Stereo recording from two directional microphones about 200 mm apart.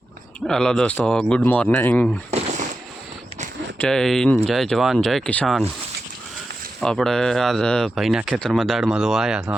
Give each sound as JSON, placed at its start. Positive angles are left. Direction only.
{"t": 0.4, "sound": "speech", "side_deg": 5}
{"t": 2.3, "sound": "a sound", "side_deg": -35}
{"t": 3.8, "sound": "speech", "side_deg": 5}
{"t": 6.7, "sound": "speech", "side_deg": 0}